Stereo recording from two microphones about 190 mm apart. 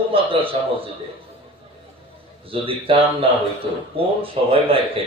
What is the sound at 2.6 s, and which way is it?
A man's voice, 30° right (ahead or behind).